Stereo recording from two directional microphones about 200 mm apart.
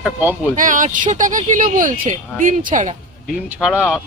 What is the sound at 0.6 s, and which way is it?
Speech, 40° right (ahead or behind).